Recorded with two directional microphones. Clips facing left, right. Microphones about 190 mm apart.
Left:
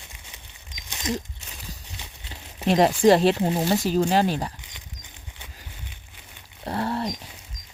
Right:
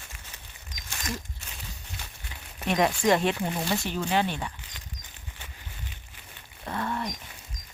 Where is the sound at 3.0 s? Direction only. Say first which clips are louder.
Left 7 dB; 35° left (ahead or behind).